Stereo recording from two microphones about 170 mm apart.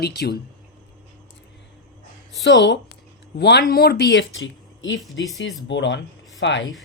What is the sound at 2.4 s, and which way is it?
Speech, 90° left.